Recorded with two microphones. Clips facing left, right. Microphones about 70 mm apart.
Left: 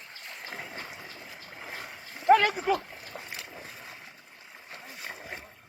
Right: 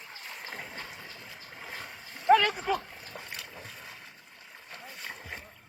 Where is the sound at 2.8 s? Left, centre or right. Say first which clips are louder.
Left 2 dB; centre.